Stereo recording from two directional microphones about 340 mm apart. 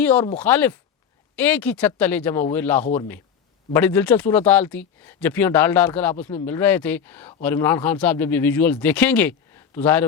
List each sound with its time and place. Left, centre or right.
0.0 s speech: centre